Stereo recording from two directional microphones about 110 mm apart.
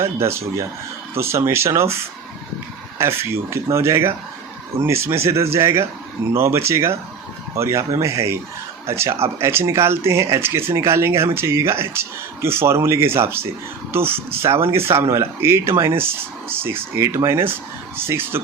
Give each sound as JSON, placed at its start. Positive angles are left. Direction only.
{"t": 0.0, "sound": "speech", "side_deg": -25}
{"t": 3.0, "sound": "speech", "side_deg": -25}